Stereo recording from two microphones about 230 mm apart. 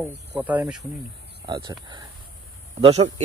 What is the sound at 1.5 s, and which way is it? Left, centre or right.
Speech, right.